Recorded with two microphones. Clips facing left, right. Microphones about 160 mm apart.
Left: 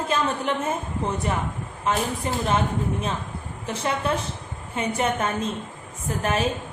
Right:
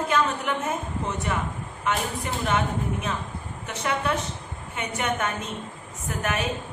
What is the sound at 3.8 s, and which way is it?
A woman's voice, 30° left (ahead or behind).